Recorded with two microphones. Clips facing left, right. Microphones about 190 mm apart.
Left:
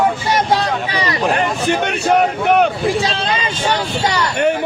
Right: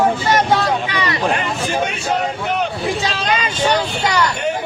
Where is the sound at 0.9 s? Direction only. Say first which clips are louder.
Left 1 dB; 35° left (ahead or behind).